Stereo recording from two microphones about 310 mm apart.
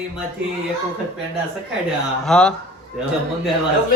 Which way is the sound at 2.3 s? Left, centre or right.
Centre.